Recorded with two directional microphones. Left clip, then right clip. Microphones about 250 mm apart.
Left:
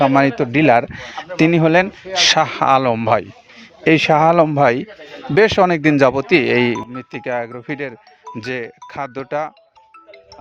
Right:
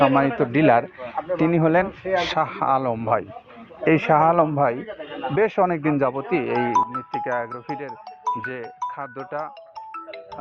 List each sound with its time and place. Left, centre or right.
0.0 s speech: left